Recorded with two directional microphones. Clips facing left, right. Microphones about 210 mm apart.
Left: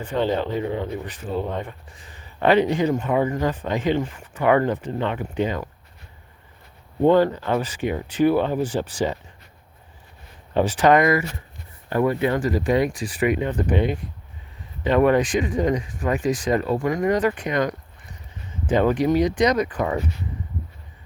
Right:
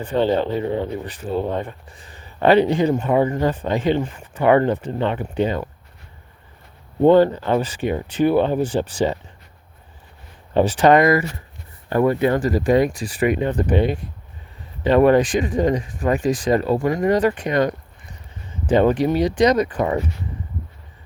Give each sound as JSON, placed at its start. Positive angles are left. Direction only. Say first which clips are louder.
{"t": 0.0, "sound": "speech", "louder": "right 4 dB", "side_deg": -30}
{"t": 2.4, "sound": "speech", "louder": "right 3 dB", "side_deg": -30}
{"t": 7.0, "sound": "speech", "louder": "right 4 dB", "side_deg": -30}
{"t": 10.5, "sound": "speech", "louder": "right 3 dB", "side_deg": -30}
{"t": 11.9, "sound": "speech", "louder": "right 3 dB", "side_deg": -45}